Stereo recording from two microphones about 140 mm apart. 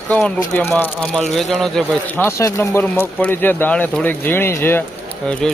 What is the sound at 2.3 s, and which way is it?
Speech, 20° left (ahead or behind).